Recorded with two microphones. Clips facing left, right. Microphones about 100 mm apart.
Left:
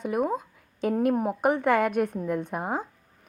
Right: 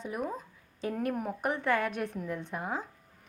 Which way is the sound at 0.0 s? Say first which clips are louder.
Left 9 dB; 55° left (ahead or behind).